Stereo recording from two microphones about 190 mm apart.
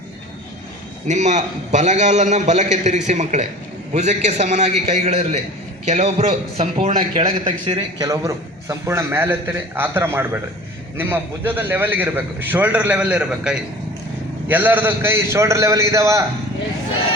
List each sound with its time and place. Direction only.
1.0 s a man's voice: 40° right (ahead or behind); by 16.2 s 15° right (ahead or behind)